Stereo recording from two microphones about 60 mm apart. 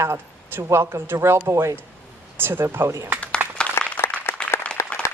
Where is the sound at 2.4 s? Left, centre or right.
Right.